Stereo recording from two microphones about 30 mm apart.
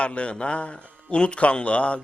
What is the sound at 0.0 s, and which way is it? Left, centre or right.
A man's voice, left.